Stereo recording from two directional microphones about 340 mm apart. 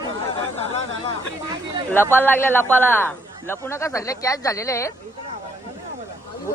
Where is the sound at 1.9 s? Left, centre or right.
Centre.